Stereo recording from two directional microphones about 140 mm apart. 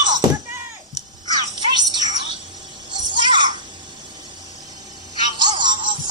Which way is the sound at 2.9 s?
35° right (ahead or behind).